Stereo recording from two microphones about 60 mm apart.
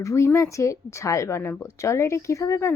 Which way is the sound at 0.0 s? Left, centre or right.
Left.